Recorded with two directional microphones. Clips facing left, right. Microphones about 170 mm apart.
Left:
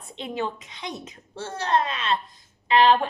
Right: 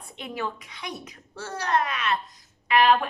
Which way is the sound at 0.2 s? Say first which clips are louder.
Left 3 dB; 25° left (ahead or behind).